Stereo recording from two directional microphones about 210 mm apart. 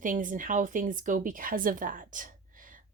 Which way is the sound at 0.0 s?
40° right (ahead or behind).